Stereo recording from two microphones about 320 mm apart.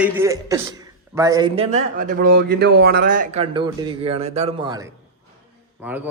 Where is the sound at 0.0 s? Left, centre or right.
Centre.